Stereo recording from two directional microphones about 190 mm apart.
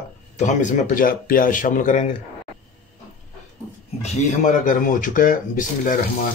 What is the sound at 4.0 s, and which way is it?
Speech, 45° left (ahead or behind).